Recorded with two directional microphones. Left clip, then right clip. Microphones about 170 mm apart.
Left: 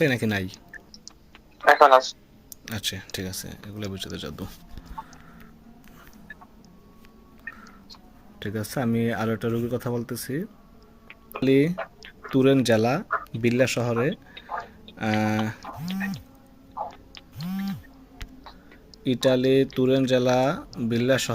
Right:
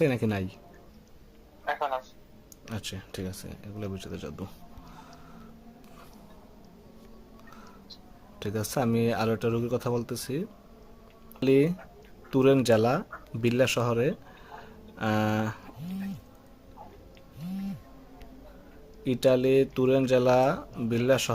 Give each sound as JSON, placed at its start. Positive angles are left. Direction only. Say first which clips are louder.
{"t": 0.0, "sound": "speech", "louder": "left 3 dB", "side_deg": -10}
{"t": 1.6, "sound": "a man's voice", "louder": "left 16 dB", "side_deg": 65}
{"t": 2.6, "sound": "speech", "louder": "left 8 dB", "side_deg": -5}
{"t": 8.4, "sound": "speech", "louder": "even", "side_deg": -5}
{"t": 11.8, "sound": "a sound", "louder": "left 14 dB", "side_deg": 65}
{"t": 12.3, "sound": "speech", "louder": "left 2 dB", "side_deg": 0}
{"t": 19.0, "sound": "speech", "louder": "left 2 dB", "side_deg": 0}